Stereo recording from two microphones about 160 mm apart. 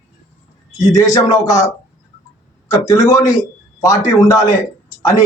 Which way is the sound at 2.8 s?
20° left (ahead or behind).